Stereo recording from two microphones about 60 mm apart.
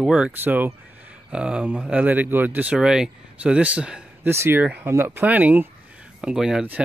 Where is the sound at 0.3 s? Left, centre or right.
Right.